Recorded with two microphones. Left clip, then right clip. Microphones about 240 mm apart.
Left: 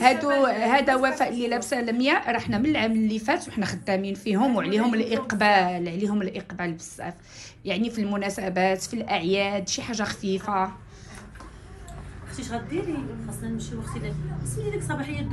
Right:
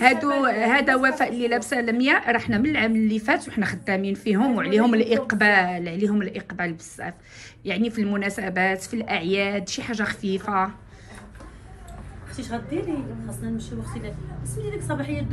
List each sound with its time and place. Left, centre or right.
0.0 s a woman's voice: centre
12.4 s a woman's voice: centre